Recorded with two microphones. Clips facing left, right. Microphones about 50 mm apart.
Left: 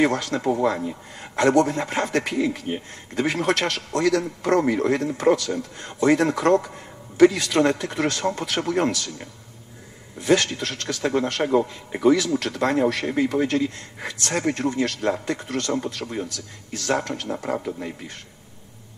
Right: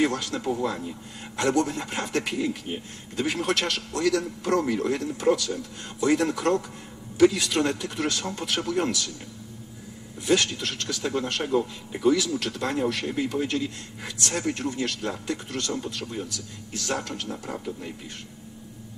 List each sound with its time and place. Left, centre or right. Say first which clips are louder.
0.0 s a man's voice: left 4 dB; left